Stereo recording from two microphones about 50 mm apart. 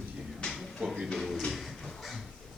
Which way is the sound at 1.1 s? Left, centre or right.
Centre.